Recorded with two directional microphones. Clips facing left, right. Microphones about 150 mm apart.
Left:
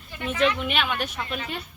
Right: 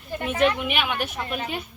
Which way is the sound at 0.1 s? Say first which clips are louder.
Right 5 dB; 45° right (ahead or behind).